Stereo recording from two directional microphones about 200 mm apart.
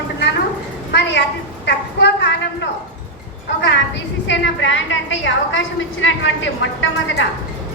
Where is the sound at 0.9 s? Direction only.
60° left (ahead or behind).